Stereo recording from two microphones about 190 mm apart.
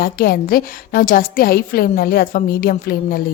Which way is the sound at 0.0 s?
50° left (ahead or behind).